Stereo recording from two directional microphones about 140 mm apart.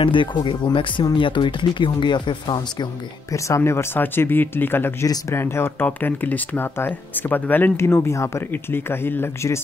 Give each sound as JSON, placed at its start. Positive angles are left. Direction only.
{"t": 0.0, "sound": "speech", "side_deg": 35}